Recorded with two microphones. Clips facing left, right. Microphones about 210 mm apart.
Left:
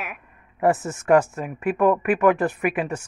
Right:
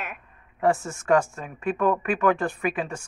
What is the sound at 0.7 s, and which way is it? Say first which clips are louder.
Speech: left 3 dB; 20° left (ahead or behind).